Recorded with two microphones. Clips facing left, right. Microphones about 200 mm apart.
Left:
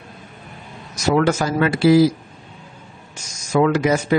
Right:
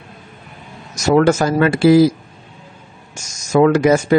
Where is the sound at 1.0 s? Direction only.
45° right (ahead or behind).